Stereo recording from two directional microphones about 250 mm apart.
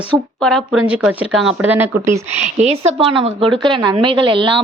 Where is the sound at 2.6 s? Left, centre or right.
Right.